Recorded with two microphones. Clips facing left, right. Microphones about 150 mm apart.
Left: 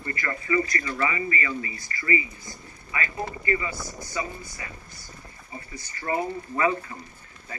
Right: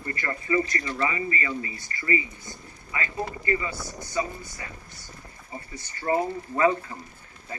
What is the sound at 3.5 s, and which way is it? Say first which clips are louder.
Speech: even; 15° left (ahead or behind).